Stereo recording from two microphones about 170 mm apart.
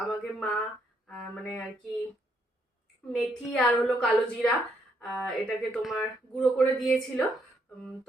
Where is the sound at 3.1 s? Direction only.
Centre (ahead or behind).